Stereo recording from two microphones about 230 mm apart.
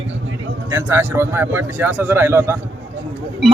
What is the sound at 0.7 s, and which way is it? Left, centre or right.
A man's voice, centre.